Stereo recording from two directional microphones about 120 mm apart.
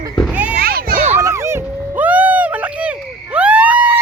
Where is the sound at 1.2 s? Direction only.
25° right (ahead or behind).